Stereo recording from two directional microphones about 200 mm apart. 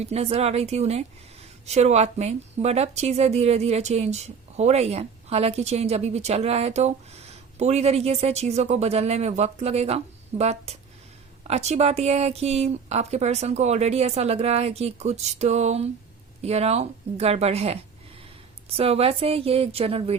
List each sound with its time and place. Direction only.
0.0 s a woman's voice: 30° right (ahead or behind)
18.8 s speech: 30° right (ahead or behind)